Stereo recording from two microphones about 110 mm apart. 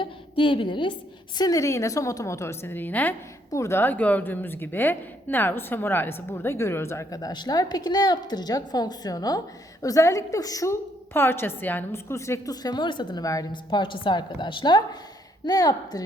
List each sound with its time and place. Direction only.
0.0 s a sound: 50° left (ahead or behind)
1.4 s a woman's voice: 30° left (ahead or behind)
13.5 s a woman's voice: 45° left (ahead or behind)